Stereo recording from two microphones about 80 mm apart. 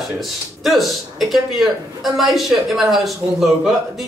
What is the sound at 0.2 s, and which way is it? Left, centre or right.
Speech, centre.